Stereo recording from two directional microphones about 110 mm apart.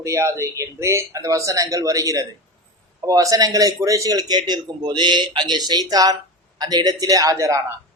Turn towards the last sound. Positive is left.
turn(degrees=-30)  # may be behind; listen again after turning